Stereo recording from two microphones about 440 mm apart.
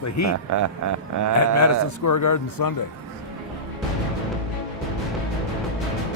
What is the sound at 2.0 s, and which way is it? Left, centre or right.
Speech, left.